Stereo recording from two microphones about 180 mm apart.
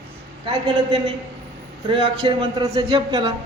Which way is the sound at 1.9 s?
25° right (ahead or behind).